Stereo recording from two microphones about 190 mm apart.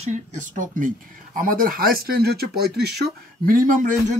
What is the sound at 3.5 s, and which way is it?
Speech, 45° right (ahead or behind).